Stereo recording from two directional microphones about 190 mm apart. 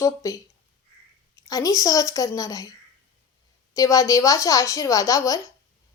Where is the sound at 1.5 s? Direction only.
20° left (ahead or behind).